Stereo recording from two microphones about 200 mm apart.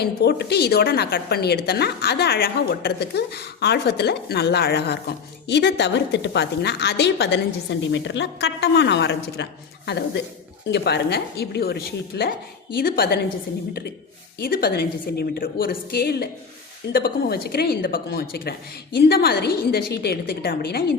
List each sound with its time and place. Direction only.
0.0 s a woman's voice: 55° left (ahead or behind)
14.3 s a woman's voice: 50° left (ahead or behind)